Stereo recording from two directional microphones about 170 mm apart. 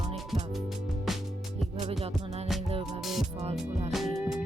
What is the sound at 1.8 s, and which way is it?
Music, 40° right (ahead or behind).